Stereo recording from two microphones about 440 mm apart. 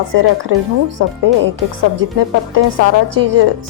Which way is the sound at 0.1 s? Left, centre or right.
Right.